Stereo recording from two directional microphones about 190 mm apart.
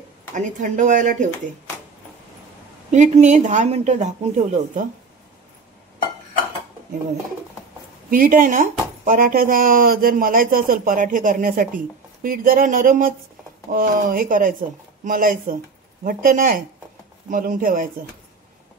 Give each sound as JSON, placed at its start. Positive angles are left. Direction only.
{"t": 0.3, "sound": "speech", "side_deg": -40}
{"t": 2.9, "sound": "speech", "side_deg": -40}
{"t": 8.1, "sound": "speech", "side_deg": -45}